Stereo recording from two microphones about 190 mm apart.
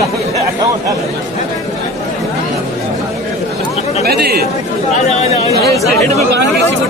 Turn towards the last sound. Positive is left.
turn(degrees=0)  # may be behind; listen again after turning